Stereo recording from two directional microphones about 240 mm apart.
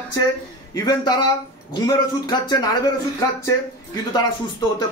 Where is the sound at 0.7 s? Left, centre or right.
Centre.